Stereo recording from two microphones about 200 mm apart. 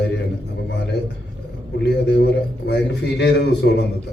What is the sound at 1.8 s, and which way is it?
A man's voice, 55° left (ahead or behind).